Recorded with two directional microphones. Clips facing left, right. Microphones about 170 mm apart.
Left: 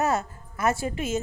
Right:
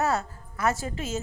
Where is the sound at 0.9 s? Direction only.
35° right (ahead or behind).